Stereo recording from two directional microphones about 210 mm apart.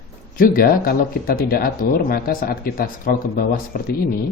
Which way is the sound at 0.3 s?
45° left (ahead or behind).